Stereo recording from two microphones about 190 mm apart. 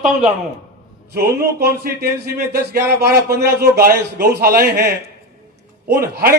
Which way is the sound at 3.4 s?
55° right (ahead or behind).